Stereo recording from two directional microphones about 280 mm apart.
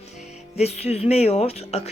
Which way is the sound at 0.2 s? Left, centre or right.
Left.